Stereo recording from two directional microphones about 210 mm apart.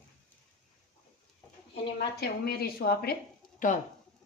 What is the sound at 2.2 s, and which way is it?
Speech, 50° left (ahead or behind).